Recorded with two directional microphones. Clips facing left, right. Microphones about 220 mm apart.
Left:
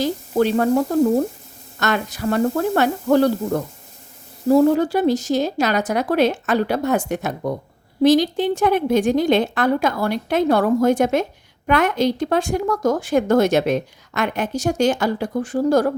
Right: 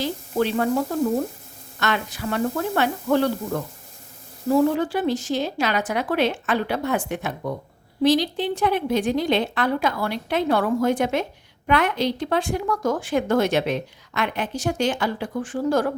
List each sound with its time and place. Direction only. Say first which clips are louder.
0.0 s a woman's voice: left 5 dB; 45° left (ahead or behind)
1.8 s a woman's voice: left 4 dB; 45° left (ahead or behind)